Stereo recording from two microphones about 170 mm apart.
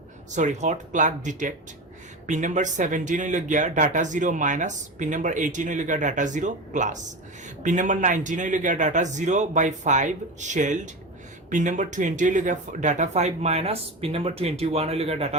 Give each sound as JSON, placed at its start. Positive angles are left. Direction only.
{"t": 0.3, "sound": "speech", "side_deg": -45}